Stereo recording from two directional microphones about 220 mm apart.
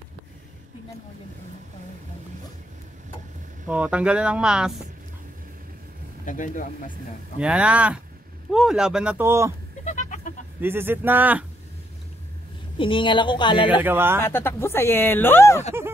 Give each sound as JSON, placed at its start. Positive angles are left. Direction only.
{"t": 3.6, "sound": "speech", "side_deg": -5}
{"t": 6.2, "sound": "speech", "side_deg": 35}
{"t": 7.3, "sound": "speech", "side_deg": -5}
{"t": 9.8, "sound": "goat", "side_deg": 35}
{"t": 10.6, "sound": "speech", "side_deg": -10}
{"t": 12.7, "sound": "a woman's voice", "side_deg": 20}
{"t": 13.7, "sound": "speech", "side_deg": -10}
{"t": 14.2, "sound": "speech", "side_deg": 10}